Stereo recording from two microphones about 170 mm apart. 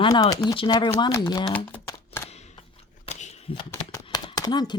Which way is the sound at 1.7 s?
15° left (ahead or behind).